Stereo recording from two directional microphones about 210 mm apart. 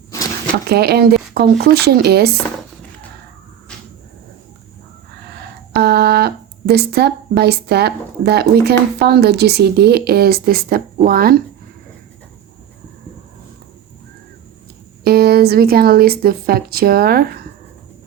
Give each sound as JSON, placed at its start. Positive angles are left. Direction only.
{"t": 0.7, "sound": "speech", "side_deg": -50}
{"t": 5.3, "sound": "speech", "side_deg": -50}
{"t": 15.0, "sound": "speech", "side_deg": -45}